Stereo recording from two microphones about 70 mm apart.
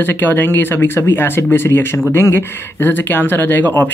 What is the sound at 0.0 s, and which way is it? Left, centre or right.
Speech, left.